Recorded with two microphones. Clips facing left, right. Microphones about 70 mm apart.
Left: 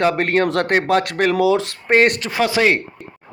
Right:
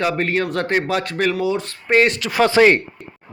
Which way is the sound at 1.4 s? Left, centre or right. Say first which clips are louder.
Left 5 dB; left.